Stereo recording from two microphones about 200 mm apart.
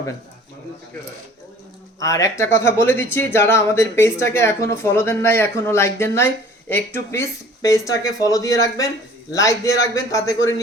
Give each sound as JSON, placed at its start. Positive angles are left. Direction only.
{"t": 2.0, "sound": "speech", "side_deg": 15}